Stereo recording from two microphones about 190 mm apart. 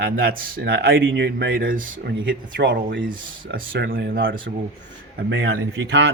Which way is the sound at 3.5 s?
60° right (ahead or behind).